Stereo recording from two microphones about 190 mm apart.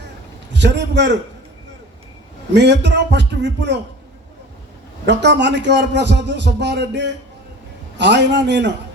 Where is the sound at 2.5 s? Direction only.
65° right (ahead or behind).